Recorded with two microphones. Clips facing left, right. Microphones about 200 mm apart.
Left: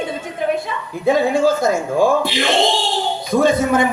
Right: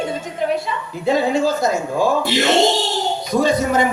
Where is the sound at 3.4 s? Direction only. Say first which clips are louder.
Left 2 dB; 55° left (ahead or behind).